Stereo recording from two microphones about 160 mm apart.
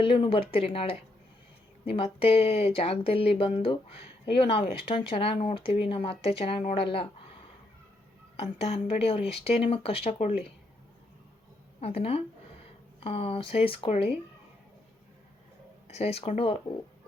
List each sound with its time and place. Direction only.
0.0 s speech: 35° left (ahead or behind)
8.4 s speech: 40° left (ahead or behind)
11.8 s speech: 40° left (ahead or behind)
15.9 s speech: 40° left (ahead or behind)